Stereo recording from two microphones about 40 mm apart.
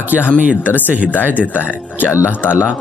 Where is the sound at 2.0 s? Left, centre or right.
Left.